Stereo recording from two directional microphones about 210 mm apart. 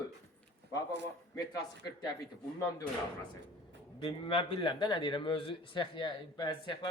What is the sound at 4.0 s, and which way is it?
A man's voice, 25° left (ahead or behind).